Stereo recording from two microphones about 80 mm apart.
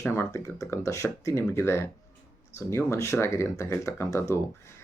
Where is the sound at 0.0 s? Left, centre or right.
Left.